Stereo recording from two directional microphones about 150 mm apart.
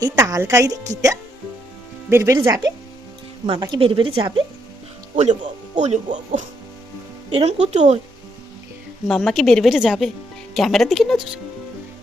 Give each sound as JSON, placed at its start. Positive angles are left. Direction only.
{"t": 0.0, "sound": "speech", "side_deg": -20}
{"t": 3.4, "sound": "speech", "side_deg": -35}
{"t": 5.1, "sound": "speech", "side_deg": -55}
{"t": 9.0, "sound": "a woman's voice", "side_deg": 0}